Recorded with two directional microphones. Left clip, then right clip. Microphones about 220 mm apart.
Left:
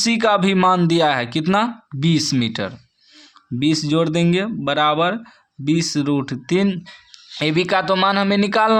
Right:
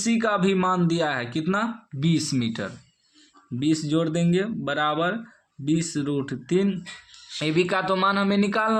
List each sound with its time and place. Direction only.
0.0 s speech: 30° left (ahead or behind)